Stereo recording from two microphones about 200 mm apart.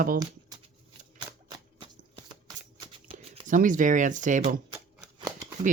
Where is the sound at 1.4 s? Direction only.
20° right (ahead or behind).